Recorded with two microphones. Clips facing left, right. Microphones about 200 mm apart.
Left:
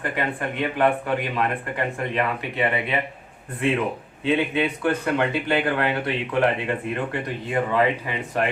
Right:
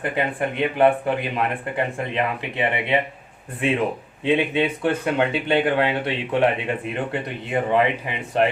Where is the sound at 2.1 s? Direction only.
20° right (ahead or behind).